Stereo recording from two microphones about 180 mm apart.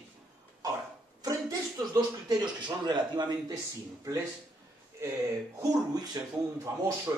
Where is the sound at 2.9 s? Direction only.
25° right (ahead or behind).